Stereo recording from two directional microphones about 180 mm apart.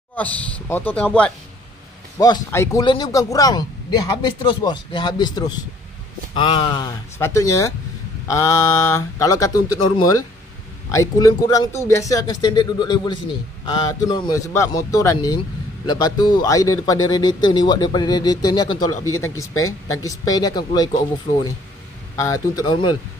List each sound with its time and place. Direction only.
0.1 s speech: 10° left (ahead or behind)
2.1 s a man's voice: 20° left (ahead or behind)
7.2 s a man's voice: 15° left (ahead or behind)
22.1 s a man's voice: 20° left (ahead or behind)